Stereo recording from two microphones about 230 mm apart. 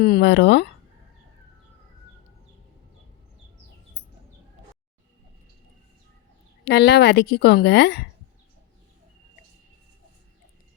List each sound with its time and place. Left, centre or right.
0.0 s a woman's voice: left
6.7 s a woman's voice: left